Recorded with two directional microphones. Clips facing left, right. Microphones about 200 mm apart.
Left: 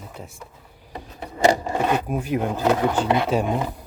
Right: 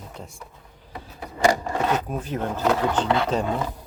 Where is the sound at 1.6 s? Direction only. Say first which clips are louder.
Left 2 dB; 15° left (ahead or behind).